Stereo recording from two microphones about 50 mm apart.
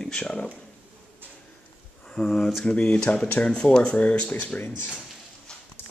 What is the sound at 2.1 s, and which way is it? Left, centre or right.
Speech, centre.